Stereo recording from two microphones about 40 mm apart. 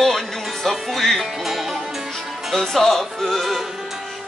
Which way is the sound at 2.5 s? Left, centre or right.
Centre.